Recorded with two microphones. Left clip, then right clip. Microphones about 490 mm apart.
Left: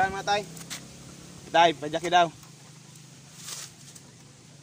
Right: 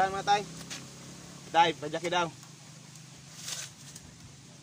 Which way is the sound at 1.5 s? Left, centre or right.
Centre.